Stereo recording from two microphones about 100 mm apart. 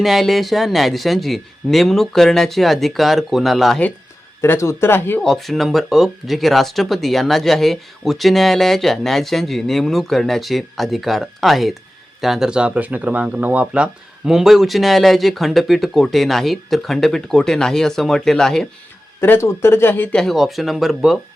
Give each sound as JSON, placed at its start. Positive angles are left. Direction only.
{"t": 0.0, "sound": "speech", "side_deg": 0}
{"t": 4.4, "sound": "speech", "side_deg": 25}
{"t": 5.2, "sound": "speech", "side_deg": 5}
{"t": 19.2, "sound": "speech", "side_deg": 25}
{"t": 20.1, "sound": "speech", "side_deg": 0}